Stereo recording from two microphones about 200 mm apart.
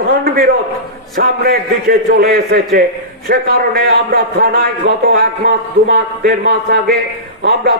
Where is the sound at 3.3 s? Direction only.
50° right (ahead or behind).